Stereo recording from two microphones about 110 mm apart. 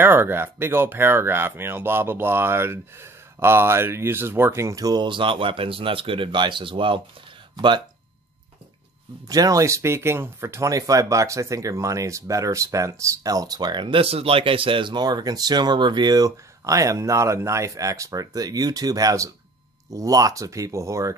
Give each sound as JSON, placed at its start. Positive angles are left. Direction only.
{"t": 0.0, "sound": "speech", "side_deg": -20}
{"t": 9.3, "sound": "speech", "side_deg": -30}